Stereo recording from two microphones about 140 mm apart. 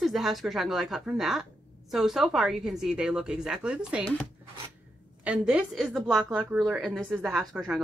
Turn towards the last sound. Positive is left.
turn(degrees=-5)  # may be behind; listen again after turning